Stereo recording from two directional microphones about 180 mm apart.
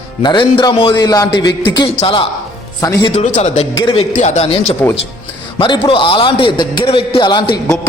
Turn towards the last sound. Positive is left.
turn(degrees=25)  # may be behind; listen again after turning